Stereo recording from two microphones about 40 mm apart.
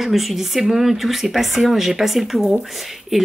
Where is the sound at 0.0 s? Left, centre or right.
Centre.